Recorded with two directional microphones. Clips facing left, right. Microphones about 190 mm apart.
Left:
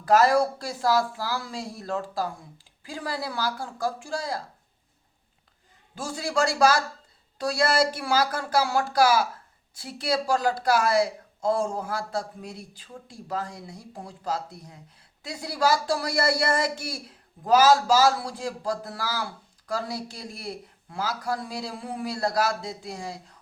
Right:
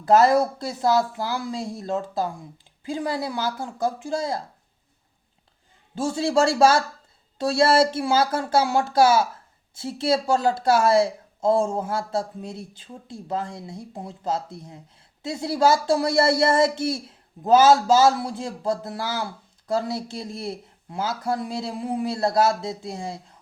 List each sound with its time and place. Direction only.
0.0 s speech: 20° right (ahead or behind)
5.9 s speech: 25° right (ahead or behind)